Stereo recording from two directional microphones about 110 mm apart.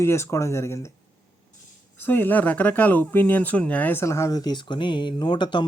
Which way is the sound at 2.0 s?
20° left (ahead or behind).